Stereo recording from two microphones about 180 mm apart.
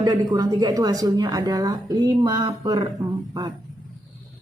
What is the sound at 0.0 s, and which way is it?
A woman's voice, 20° right (ahead or behind).